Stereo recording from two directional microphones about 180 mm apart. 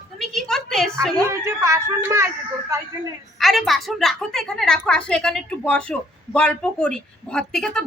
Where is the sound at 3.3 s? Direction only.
Centre (ahead or behind).